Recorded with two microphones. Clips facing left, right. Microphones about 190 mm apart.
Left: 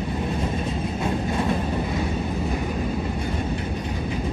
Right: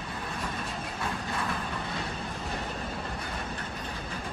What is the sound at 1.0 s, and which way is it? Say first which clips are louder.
Train: left 9 dB; 25° left (ahead or behind).